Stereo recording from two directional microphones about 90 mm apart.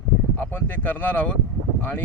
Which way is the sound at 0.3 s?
20° left (ahead or behind).